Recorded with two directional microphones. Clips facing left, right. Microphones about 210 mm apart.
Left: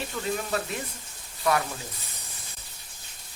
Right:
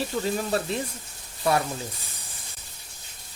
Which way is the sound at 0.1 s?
30° right (ahead or behind).